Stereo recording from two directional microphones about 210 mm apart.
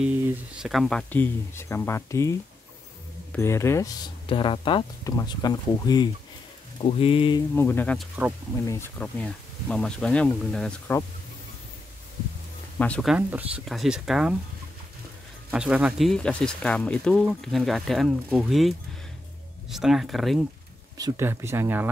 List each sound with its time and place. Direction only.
0.6 s speech: centre (ahead or behind)
3.3 s speech: 10° left (ahead or behind)
7.5 s speech: 10° left (ahead or behind)
12.7 s speech: 5° left (ahead or behind)
15.5 s speech: 5° right (ahead or behind)
21.0 s speech: 10° right (ahead or behind)